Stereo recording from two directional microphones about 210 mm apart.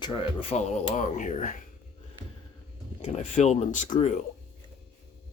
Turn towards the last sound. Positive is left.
turn(degrees=35)  # may be behind; listen again after turning